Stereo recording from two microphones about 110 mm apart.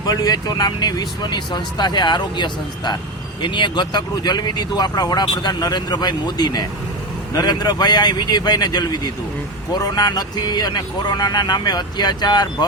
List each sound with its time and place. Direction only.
0.0 s speech: 35° left (ahead or behind)